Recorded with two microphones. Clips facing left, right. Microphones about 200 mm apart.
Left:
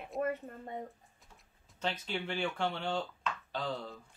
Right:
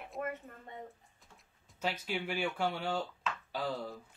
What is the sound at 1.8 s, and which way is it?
Speech, 10° right (ahead or behind).